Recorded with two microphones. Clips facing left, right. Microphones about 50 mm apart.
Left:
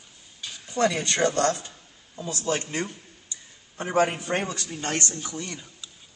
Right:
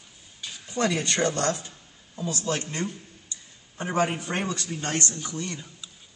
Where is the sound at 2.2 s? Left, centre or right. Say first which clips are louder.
Left 1 dB; centre.